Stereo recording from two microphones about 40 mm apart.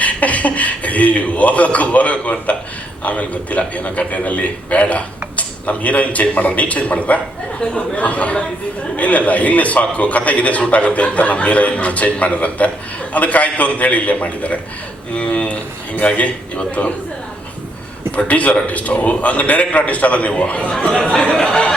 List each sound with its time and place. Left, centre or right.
0.0 s a man's voice: left
18.3 s a man's voice: left
21.0 s speech: left